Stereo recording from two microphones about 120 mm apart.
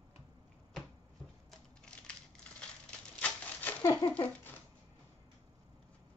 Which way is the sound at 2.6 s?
10° left (ahead or behind).